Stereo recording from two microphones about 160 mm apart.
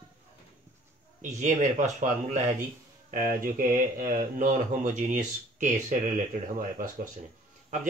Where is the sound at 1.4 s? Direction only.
50° right (ahead or behind).